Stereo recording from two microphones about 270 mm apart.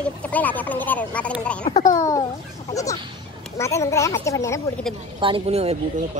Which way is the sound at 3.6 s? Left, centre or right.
Centre.